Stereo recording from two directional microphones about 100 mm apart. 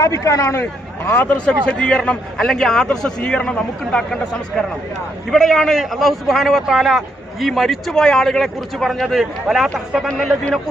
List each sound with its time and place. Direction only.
0.0 s speech: 30° left (ahead or behind)
1.1 s a man's voice: 15° left (ahead or behind); by 10.6 s centre (ahead or behind)